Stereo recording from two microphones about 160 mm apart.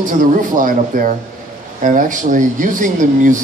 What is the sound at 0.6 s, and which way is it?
Speech, 55° right (ahead or behind).